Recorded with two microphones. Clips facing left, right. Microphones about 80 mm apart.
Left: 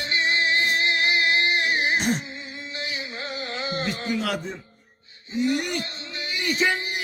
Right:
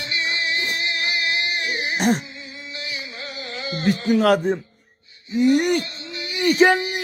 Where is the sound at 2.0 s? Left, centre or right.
Right.